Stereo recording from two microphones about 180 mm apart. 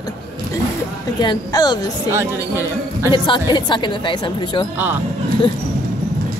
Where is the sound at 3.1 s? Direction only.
30° left (ahead or behind).